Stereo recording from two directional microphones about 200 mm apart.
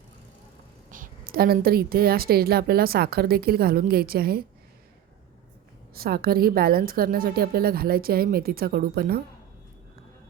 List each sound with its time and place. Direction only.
0.9 s a woman's voice: 40° right (ahead or behind)
5.9 s a woman's voice: 50° right (ahead or behind)